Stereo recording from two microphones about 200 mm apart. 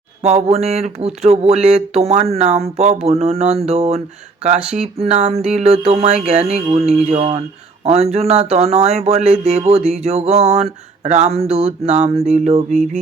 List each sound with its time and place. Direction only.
0.2 s speech: 35° right (ahead or behind)